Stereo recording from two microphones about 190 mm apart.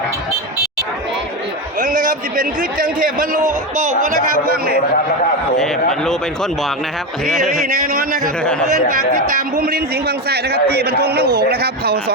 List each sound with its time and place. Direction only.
1.8 s a man's voice: 45° right (ahead or behind)
4.5 s a man's voice: 50° right (ahead or behind)
5.5 s speech: centre (ahead or behind)
9.6 s a man's voice: 55° right (ahead or behind)